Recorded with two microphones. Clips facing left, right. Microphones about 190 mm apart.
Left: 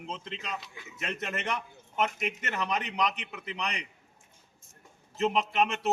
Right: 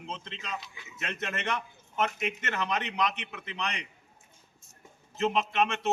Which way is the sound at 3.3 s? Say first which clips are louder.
Left 1 dB; 15° left (ahead or behind).